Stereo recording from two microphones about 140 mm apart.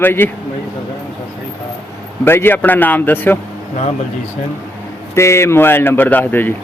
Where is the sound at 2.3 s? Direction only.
15° left (ahead or behind).